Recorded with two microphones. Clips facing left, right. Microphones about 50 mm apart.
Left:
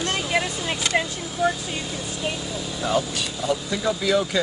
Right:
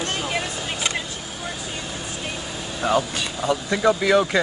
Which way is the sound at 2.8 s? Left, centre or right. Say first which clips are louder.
Right 3 dB; right.